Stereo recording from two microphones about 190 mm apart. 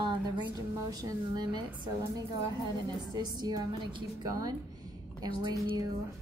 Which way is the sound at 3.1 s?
20° right (ahead or behind).